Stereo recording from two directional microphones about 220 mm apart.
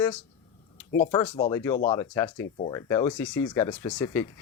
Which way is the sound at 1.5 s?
15° left (ahead or behind).